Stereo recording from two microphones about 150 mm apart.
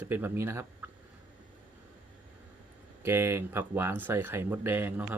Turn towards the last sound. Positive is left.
turn(degrees=-10)  # may be behind; listen again after turning